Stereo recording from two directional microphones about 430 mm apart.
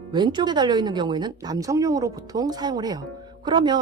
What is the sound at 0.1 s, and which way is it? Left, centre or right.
Speech, centre.